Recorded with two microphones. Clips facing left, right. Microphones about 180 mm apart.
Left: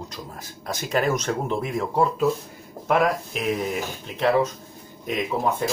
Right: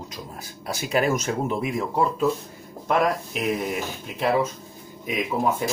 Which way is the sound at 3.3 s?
Centre (ahead or behind).